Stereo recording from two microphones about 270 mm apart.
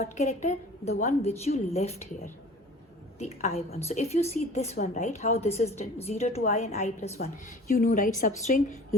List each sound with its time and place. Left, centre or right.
0.0 s a woman's voice: left